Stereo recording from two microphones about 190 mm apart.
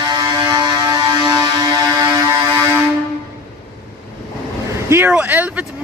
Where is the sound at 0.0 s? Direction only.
20° right (ahead or behind).